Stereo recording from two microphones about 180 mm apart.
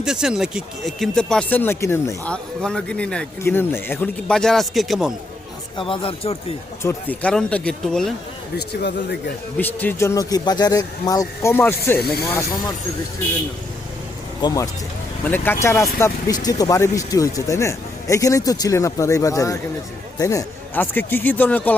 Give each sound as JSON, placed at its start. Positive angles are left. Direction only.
{"t": 0.0, "sound": "a man's voice", "side_deg": -5}
{"t": 5.7, "sound": "speech", "side_deg": 30}
{"t": 6.8, "sound": "a man's voice", "side_deg": 10}
{"t": 8.5, "sound": "speech", "side_deg": 65}
{"t": 9.6, "sound": "speech", "side_deg": 10}
{"t": 14.4, "sound": "speech", "side_deg": 20}